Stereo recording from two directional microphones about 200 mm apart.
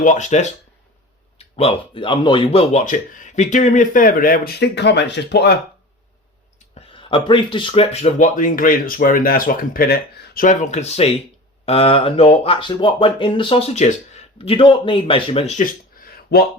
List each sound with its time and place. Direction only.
0.0 s speech: 40° left (ahead or behind); by 5.5 s 60° left (ahead or behind)
6.7 s speech: 25° left (ahead or behind); by 16.5 s 50° left (ahead or behind)